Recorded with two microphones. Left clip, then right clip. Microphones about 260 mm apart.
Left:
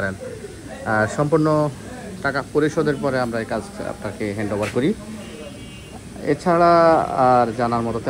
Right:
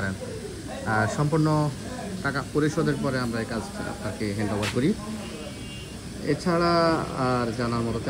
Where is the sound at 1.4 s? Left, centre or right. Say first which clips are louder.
Left 7 dB; left.